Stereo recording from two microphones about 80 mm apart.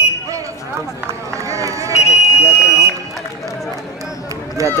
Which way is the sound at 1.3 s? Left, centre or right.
Right.